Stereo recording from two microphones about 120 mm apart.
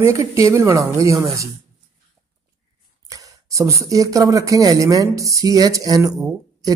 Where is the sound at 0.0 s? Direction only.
25° right (ahead or behind).